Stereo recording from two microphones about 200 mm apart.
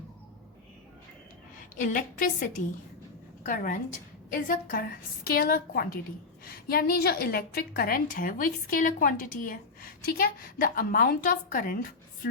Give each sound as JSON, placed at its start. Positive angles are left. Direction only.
{"t": 1.8, "sound": "a woman's voice", "side_deg": 40}